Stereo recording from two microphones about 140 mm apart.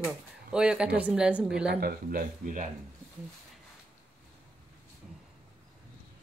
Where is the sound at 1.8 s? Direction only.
90° right; by 2.7 s 75° right (ahead or behind).